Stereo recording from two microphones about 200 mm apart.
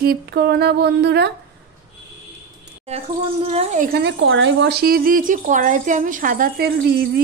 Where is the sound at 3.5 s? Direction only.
40° right (ahead or behind).